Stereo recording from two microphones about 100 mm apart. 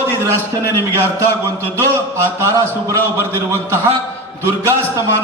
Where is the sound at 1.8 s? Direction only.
30° right (ahead or behind).